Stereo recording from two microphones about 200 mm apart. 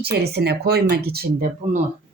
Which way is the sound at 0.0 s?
55° right (ahead or behind).